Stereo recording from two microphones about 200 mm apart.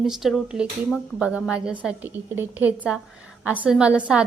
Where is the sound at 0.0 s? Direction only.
Centre (ahead or behind).